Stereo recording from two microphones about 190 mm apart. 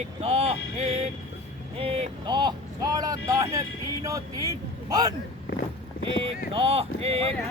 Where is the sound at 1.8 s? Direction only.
30° right (ahead or behind).